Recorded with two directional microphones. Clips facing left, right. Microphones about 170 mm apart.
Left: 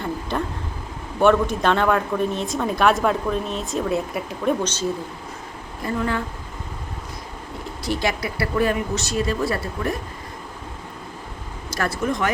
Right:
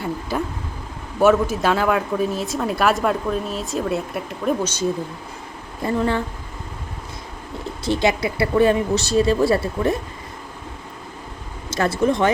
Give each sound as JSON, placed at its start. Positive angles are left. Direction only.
{"t": 0.0, "sound": "a sound", "side_deg": -5}
{"t": 1.2, "sound": "speech", "side_deg": -5}
{"t": 5.8, "sound": "speech", "side_deg": -25}
{"t": 7.9, "sound": "speech", "side_deg": -25}
{"t": 11.7, "sound": "speech", "side_deg": -25}